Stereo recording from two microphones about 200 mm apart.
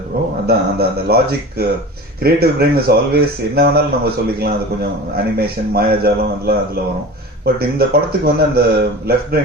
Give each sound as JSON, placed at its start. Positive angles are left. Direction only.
{"t": 0.4, "sound": "speech", "side_deg": -50}